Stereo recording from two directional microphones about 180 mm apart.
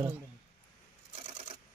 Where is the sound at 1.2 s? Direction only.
30° right (ahead or behind).